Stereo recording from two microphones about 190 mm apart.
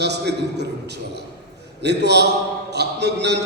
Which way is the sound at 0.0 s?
60° right (ahead or behind).